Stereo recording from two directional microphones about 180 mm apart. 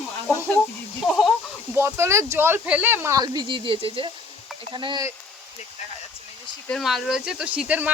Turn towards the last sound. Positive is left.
turn(degrees=-10)  # may be behind; listen again after turning